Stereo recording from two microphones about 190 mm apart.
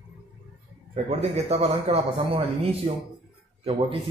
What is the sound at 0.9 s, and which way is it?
A man's voice, 35° right (ahead or behind).